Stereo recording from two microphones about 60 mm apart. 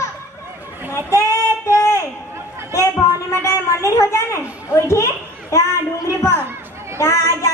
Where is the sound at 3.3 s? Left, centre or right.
Left.